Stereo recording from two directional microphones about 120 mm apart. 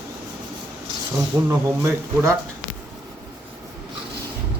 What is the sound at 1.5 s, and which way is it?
Speech, 25° right (ahead or behind).